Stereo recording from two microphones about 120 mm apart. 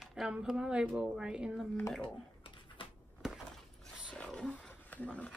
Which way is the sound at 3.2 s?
5° right (ahead or behind).